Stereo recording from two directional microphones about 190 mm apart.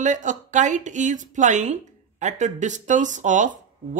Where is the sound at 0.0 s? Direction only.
40° right (ahead or behind).